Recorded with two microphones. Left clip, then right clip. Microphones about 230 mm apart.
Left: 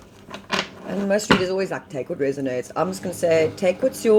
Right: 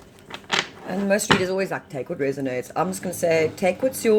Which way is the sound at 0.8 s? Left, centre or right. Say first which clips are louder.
Left 1 dB; right.